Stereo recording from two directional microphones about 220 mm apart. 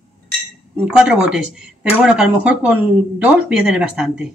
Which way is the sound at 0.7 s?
5° right (ahead or behind).